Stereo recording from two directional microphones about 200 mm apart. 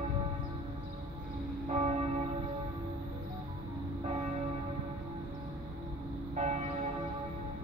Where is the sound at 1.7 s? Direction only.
35° right (ahead or behind).